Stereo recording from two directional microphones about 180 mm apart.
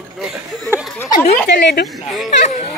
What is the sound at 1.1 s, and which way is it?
Speech, 35° left (ahead or behind).